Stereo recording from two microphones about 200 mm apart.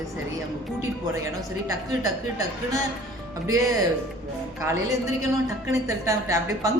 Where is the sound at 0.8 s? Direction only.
15° right (ahead or behind).